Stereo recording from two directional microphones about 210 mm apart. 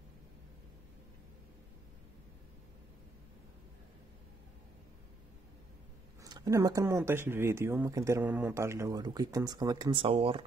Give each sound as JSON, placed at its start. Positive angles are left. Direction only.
{"t": 6.2, "sound": "speech", "side_deg": -15}